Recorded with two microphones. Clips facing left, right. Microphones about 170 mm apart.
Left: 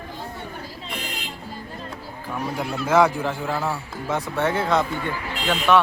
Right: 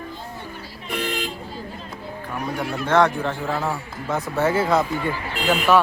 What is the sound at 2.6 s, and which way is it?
A man's voice, 5° left (ahead or behind).